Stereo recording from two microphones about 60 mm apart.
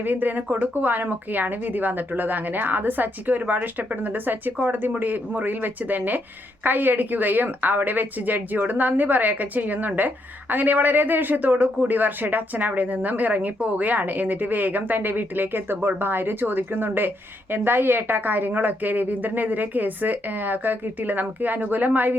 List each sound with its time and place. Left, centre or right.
0.0 s speech: right